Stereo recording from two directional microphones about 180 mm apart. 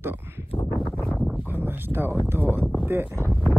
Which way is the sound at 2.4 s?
10° left (ahead or behind).